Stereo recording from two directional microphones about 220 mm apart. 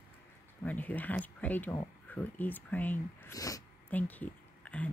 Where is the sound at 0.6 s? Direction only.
5° left (ahead or behind).